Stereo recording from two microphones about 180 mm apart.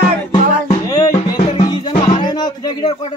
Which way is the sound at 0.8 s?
20° left (ahead or behind).